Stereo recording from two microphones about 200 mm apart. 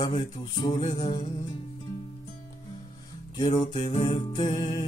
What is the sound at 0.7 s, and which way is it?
Music, 35° left (ahead or behind).